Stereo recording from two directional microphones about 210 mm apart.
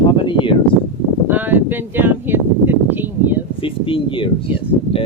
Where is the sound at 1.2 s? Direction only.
10° right (ahead or behind).